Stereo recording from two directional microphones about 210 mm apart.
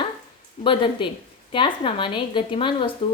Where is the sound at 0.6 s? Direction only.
25° left (ahead or behind).